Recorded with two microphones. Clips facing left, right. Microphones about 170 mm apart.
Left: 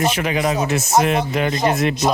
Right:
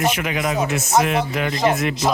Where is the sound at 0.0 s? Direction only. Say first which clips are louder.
Left 2 dB; 30° left (ahead or behind).